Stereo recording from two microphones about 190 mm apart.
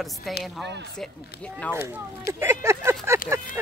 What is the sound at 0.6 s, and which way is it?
Speech, 65° right (ahead or behind).